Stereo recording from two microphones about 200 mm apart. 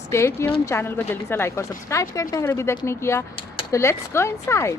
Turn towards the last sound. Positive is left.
turn(degrees=15)  # may be behind; listen again after turning